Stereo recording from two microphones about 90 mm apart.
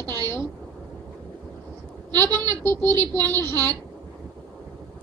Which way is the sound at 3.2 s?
25° left (ahead or behind).